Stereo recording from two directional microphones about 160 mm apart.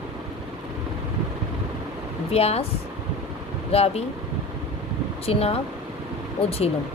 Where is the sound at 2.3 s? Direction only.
40° left (ahead or behind).